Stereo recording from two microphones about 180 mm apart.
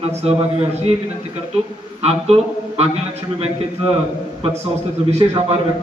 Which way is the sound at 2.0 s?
35° right (ahead or behind).